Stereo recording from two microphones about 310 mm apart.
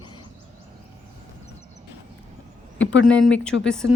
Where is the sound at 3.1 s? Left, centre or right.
Centre.